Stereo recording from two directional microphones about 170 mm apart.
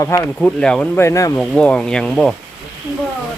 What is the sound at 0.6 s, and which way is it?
Speech, 5° left (ahead or behind).